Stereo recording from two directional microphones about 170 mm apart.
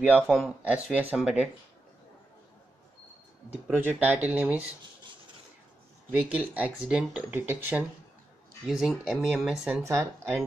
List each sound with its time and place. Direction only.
0.0 s speech: 5° right (ahead or behind)
3.6 s speech: 10° right (ahead or behind)
6.1 s speech: 10° right (ahead or behind)
8.6 s speech: centre (ahead or behind)
9.8 s speech: 15° right (ahead or behind)